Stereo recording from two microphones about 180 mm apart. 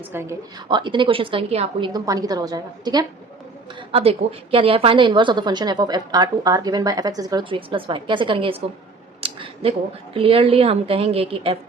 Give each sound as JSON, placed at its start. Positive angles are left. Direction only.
{"t": 0.0, "sound": "speech", "side_deg": -15}
{"t": 0.7, "sound": "a woman's voice", "side_deg": -25}
{"t": 1.9, "sound": "a woman's voice", "side_deg": -20}
{"t": 3.8, "sound": "a woman's voice", "side_deg": -30}
{"t": 9.2, "sound": "a sound", "side_deg": -30}
{"t": 10.2, "sound": "a woman's voice", "side_deg": -30}